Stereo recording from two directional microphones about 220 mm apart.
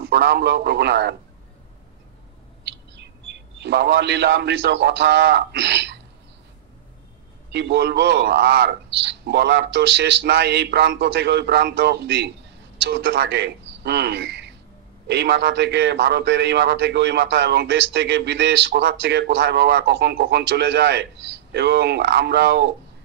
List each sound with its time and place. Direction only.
0.0 s a man's voice: 50° right (ahead or behind)
3.6 s a man's voice: 50° right (ahead or behind)
7.5 s a man's voice: 50° right (ahead or behind)